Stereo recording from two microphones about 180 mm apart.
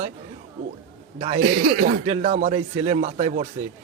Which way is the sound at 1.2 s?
40° right (ahead or behind).